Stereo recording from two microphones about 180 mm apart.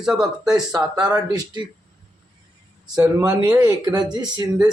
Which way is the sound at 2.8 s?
5° right (ahead or behind).